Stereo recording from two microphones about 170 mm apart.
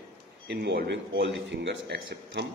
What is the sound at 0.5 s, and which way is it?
A man's voice, 85° right.